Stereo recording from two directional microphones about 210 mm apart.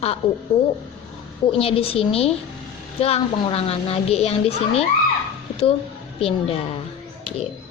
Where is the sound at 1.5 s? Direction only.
25° left (ahead or behind).